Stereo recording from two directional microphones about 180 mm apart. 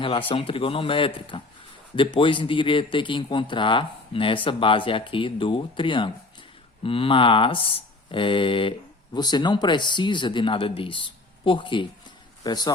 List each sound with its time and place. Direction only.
0.0 s speech: 30° left (ahead or behind)